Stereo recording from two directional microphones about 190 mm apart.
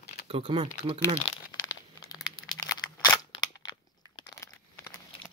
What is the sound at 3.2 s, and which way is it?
Scissors, 20° left (ahead or behind).